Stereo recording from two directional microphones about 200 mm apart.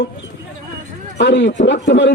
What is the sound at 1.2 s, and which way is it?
Speech, 60° left (ahead or behind).